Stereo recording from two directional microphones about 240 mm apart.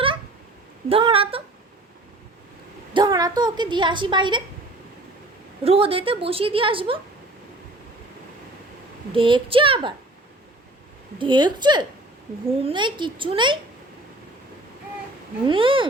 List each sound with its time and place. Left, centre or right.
0.9 s a woman's voice: right
2.9 s a woman's voice: centre
5.6 s a woman's voice: right
9.1 s a woman's voice: right
11.2 s a woman's voice: centre
15.4 s a woman's voice: right